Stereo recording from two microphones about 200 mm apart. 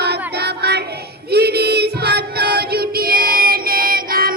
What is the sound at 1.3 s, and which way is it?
Child singing, 55° right (ahead or behind).